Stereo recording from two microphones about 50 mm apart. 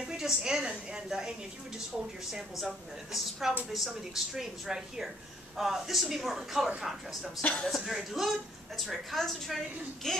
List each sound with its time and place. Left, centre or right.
0.2 s speech: centre
2.6 s a woman's voice: centre
7.4 s speech: left
7.8 s a woman's voice: centre